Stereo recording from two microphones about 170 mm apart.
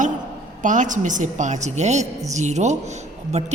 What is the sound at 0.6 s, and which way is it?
A man's voice, 50° right (ahead or behind).